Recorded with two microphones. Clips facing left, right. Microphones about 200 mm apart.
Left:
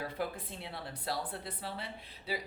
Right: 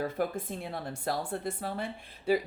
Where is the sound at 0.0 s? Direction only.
45° right (ahead or behind).